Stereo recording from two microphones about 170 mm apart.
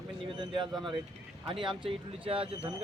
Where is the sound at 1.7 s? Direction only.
30° right (ahead or behind).